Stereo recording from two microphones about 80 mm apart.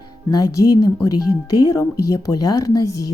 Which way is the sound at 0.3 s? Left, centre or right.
Left.